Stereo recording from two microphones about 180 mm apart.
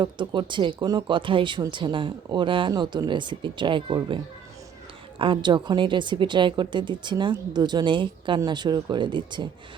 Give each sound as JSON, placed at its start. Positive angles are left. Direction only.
{"t": 0.0, "sound": "a woman's voice", "side_deg": -25}
{"t": 5.2, "sound": "a woman's voice", "side_deg": -25}